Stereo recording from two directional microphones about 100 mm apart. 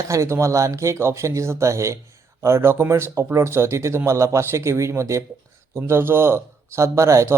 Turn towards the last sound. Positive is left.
turn(degrees=-30)  # may be behind; listen again after turning